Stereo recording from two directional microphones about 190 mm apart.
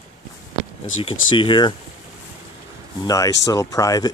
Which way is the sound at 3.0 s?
20° left (ahead or behind).